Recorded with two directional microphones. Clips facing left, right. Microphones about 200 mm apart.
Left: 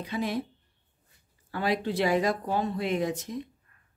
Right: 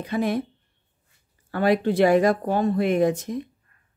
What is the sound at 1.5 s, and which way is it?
Speech, 55° right (ahead or behind).